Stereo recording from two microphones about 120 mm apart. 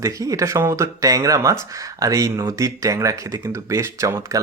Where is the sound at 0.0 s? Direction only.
25° right (ahead or behind).